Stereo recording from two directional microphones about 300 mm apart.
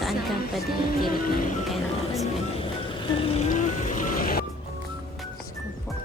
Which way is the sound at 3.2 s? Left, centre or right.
Left.